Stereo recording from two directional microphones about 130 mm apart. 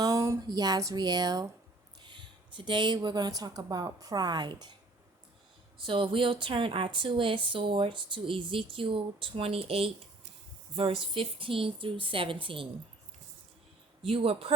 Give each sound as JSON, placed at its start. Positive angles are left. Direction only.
{"t": 0.0, "sound": "speech", "side_deg": -25}
{"t": 5.8, "sound": "a woman's voice", "side_deg": -40}
{"t": 14.0, "sound": "a woman's voice", "side_deg": -45}